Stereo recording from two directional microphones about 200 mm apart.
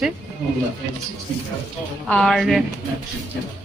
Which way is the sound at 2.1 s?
5° left (ahead or behind).